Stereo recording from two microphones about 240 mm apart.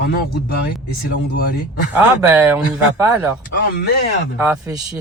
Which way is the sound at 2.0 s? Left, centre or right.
Centre.